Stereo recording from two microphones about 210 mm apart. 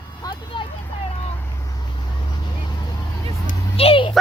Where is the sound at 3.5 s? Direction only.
25° left (ahead or behind).